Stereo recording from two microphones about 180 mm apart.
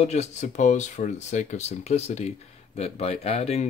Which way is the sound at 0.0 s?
40° left (ahead or behind).